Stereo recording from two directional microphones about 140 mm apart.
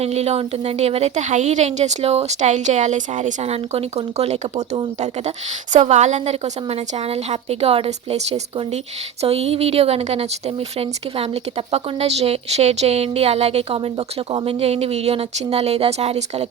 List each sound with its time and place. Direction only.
0.0 s speech: 50° right (ahead or behind)